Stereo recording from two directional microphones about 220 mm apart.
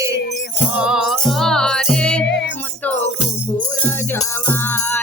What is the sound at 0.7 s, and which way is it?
Music, 5° right (ahead or behind).